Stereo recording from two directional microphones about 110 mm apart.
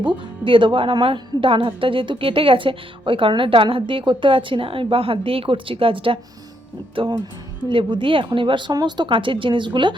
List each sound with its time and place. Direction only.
0.0 s speech: 50° right (ahead or behind)